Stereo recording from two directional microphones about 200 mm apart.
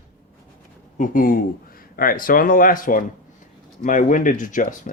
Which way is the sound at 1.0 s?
45° left (ahead or behind).